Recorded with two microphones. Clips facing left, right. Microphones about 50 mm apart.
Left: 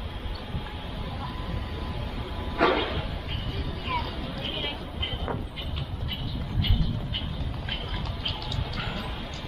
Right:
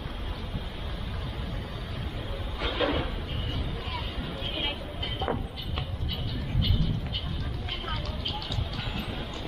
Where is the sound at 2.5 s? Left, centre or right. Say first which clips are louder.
Left 12 dB; left.